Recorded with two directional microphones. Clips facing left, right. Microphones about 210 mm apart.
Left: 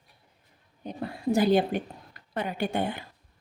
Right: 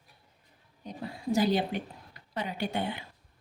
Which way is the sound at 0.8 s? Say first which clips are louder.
Left 4 dB; 55° left (ahead or behind).